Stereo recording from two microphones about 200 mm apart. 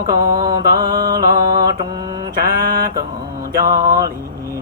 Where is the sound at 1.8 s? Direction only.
20° right (ahead or behind).